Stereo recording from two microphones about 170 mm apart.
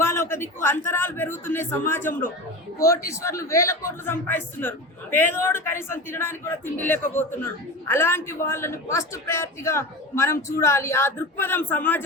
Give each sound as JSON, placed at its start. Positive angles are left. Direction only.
{"t": 0.0, "sound": "a man's voice", "side_deg": 15}